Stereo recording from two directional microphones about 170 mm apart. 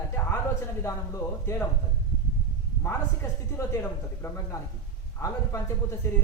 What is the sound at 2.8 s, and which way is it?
A woman's voice, 15° left (ahead or behind).